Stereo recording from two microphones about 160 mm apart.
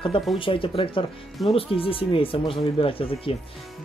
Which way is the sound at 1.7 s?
35° left (ahead or behind).